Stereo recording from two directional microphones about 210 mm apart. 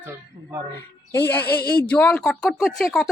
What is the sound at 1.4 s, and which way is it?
Speech, 50° left (ahead or behind).